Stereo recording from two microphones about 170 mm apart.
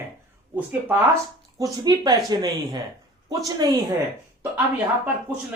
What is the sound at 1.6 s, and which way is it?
Speech, 25° right (ahead or behind).